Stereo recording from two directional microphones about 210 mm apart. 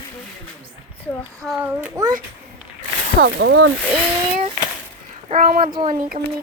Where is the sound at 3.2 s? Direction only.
60° right (ahead or behind).